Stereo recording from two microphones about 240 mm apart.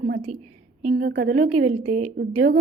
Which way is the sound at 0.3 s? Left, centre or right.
Right.